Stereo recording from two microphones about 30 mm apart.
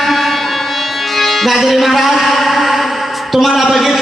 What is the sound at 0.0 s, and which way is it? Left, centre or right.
Music, centre.